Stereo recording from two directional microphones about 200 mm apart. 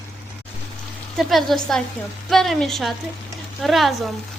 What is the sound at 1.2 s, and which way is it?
A woman's voice, centre (ahead or behind).